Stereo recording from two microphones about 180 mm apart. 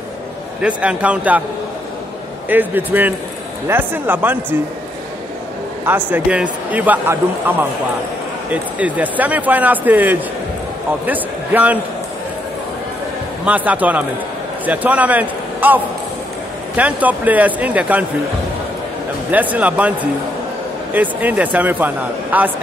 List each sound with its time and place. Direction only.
0.6 s speech: 5° right (ahead or behind)
2.5 s speech: 10° right (ahead or behind)
5.9 s a man's voice: 10° right (ahead or behind)
13.5 s a man's voice: 10° right (ahead or behind)
19.3 s speech: 10° right (ahead or behind)